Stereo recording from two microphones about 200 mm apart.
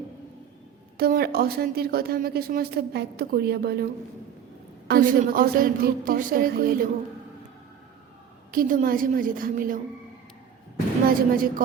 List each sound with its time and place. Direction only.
0.9 s a woman's voice: 50° right (ahead or behind)
4.9 s a woman's voice: 45° right (ahead or behind)
8.5 s a woman's voice: 45° right (ahead or behind)
11.3 s a woman's voice: 45° right (ahead or behind)